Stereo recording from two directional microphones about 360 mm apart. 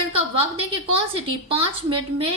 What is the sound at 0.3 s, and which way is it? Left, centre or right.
A woman's voice, centre.